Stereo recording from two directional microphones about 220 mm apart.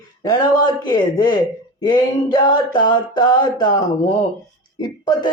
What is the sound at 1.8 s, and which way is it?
Speech, 20° left (ahead or behind).